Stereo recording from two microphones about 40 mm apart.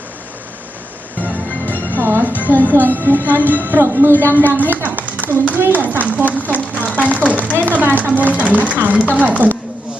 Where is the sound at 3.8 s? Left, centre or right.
Right.